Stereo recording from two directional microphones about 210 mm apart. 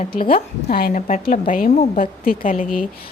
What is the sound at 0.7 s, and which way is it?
A woman's voice, 45° left (ahead or behind).